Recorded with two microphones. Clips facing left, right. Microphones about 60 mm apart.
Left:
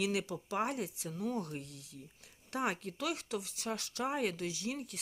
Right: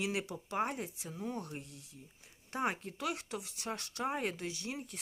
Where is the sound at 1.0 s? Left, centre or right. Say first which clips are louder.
Left 3 dB; centre.